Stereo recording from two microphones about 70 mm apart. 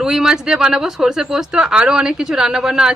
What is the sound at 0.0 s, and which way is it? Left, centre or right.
Speech, centre.